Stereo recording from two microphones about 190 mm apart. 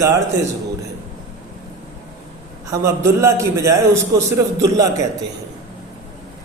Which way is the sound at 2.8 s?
15° right (ahead or behind).